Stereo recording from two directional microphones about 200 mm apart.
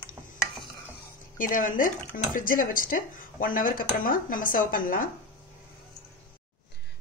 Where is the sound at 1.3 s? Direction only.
40° left (ahead or behind).